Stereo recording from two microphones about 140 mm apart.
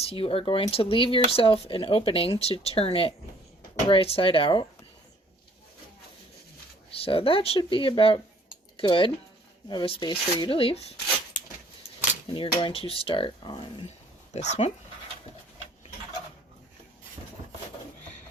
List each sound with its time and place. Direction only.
0.0 s speech: 40° left (ahead or behind)
6.9 s speech: 40° left (ahead or behind)
12.3 s speech: 40° left (ahead or behind)
14.3 s speech: 55° left (ahead or behind)